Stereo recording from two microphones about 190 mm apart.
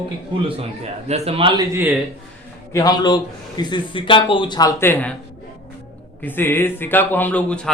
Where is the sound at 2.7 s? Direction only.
20° left (ahead or behind).